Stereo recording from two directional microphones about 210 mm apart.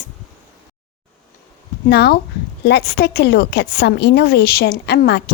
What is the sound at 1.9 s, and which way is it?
A woman's voice, 50° left (ahead or behind).